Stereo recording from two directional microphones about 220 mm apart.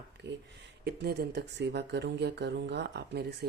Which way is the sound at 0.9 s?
45° right (ahead or behind).